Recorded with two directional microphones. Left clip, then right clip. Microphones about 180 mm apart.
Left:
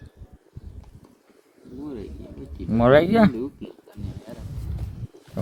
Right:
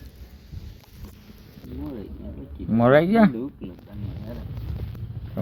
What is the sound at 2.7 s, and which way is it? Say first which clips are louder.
Speech: left 1 dB; 10° left (ahead or behind).